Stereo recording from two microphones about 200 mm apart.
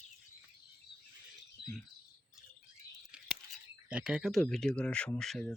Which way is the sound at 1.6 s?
55° left (ahead or behind).